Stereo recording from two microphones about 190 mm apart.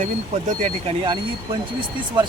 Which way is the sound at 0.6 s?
30° right (ahead or behind).